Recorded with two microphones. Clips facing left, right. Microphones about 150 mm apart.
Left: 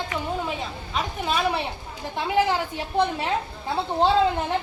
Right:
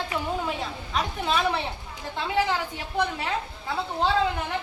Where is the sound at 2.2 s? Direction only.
20° left (ahead or behind).